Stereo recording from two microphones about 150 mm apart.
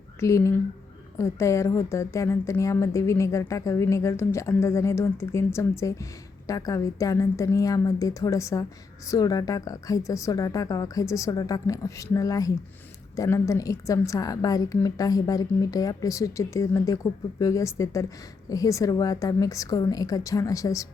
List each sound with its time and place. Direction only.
0.2 s a woman's voice: 20° left (ahead or behind)